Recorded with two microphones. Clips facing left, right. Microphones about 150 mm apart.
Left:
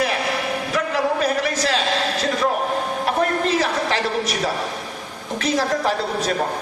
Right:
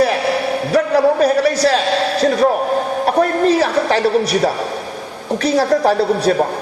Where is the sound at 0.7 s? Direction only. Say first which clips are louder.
Right 9 dB; 35° right (ahead or behind).